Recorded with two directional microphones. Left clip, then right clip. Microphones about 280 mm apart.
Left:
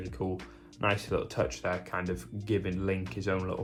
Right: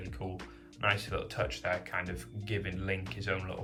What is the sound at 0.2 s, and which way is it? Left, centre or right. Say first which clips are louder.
Speech: left 8 dB; left.